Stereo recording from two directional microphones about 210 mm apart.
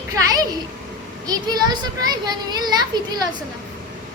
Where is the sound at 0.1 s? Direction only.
15° right (ahead or behind).